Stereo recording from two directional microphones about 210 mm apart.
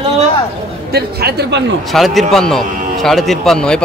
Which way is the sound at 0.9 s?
50° right (ahead or behind).